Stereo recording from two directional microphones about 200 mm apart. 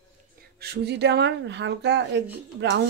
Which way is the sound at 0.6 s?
55° right (ahead or behind).